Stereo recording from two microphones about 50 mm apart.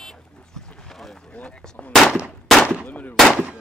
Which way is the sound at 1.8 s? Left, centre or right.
Centre.